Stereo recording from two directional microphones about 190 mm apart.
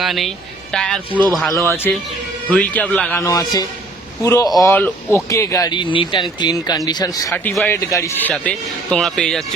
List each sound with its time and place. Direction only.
0.0 s a man's voice: centre (ahead or behind)
3.2 s a man's voice: 20° left (ahead or behind)
7.3 s a man's voice: 5° left (ahead or behind)